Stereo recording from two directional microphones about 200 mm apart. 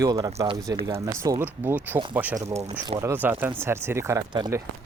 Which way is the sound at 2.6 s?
25° right (ahead or behind).